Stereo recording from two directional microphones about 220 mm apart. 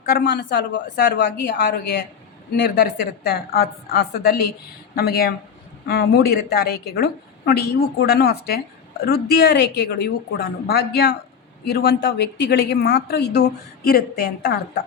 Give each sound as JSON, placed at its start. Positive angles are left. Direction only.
{"t": 0.0, "sound": "a woman's voice", "side_deg": 40}